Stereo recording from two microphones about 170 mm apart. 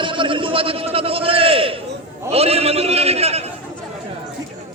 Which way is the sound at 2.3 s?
35° right (ahead or behind).